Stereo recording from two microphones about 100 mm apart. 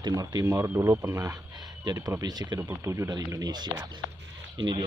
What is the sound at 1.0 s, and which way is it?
Speech, 35° right (ahead or behind).